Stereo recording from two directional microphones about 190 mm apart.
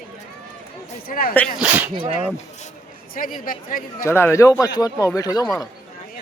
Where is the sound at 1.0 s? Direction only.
50° left (ahead or behind).